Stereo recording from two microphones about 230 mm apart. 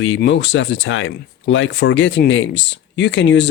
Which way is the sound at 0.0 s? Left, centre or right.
Left.